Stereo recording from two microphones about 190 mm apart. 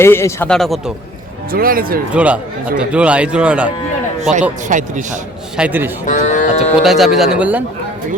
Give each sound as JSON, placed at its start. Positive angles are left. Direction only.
{"t": 0.0, "sound": "speech", "side_deg": 15}
{"t": 1.5, "sound": "speech", "side_deg": -50}
{"t": 2.1, "sound": "a man's voice", "side_deg": -5}
{"t": 4.2, "sound": "a man's voice", "side_deg": -40}
{"t": 5.5, "sound": "a man's voice", "side_deg": -10}
{"t": 6.1, "sound": "speech", "side_deg": 40}
{"t": 6.8, "sound": "speech", "side_deg": 0}